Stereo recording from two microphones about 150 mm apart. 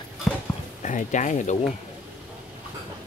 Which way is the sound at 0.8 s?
55° left (ahead or behind).